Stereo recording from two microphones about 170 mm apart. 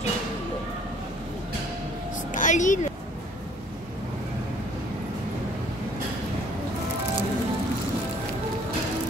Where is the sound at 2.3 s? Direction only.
45° left (ahead or behind).